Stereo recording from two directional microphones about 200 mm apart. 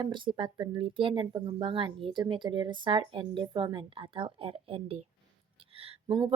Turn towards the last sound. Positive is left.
turn(degrees=-25)  # may be behind; listen again after turning